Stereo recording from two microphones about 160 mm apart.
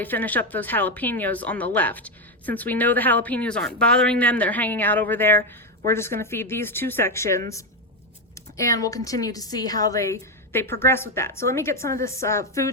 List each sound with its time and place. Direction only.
0.0 s a woman's voice: 10° left (ahead or behind)